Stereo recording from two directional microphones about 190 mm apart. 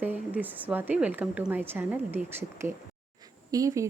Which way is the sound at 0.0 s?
10° right (ahead or behind).